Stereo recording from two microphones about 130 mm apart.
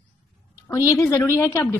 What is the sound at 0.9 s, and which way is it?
Speech, 20° left (ahead or behind).